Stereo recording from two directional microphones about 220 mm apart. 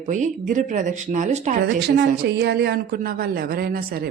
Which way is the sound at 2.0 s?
50° right (ahead or behind).